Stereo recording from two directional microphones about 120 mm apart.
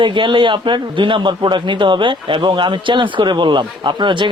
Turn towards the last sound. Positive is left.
turn(degrees=-40)  # may be behind; listen again after turning